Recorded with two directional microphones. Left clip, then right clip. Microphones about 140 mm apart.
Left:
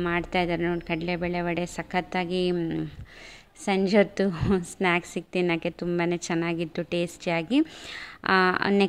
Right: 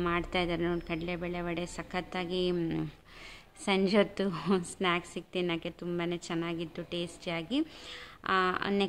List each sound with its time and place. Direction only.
0.0 s a woman's voice: 20° left (ahead or behind)
2.5 s a woman's voice: 10° left (ahead or behind)
4.9 s a woman's voice: 30° left (ahead or behind)